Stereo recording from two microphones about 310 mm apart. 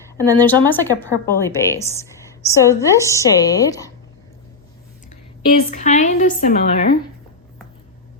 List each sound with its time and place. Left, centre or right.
0.4 s a woman's voice: centre
5.0 s a woman's voice: left